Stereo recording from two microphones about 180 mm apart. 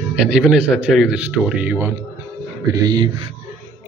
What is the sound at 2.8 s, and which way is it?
Speech, 25° right (ahead or behind).